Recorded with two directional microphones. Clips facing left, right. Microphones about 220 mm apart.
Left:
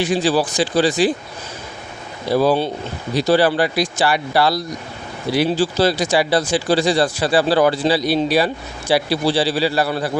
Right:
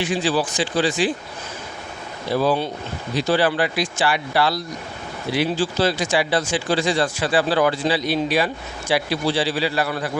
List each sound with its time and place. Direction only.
0.0 s speech: 40° left (ahead or behind)
2.3 s speech: 35° left (ahead or behind)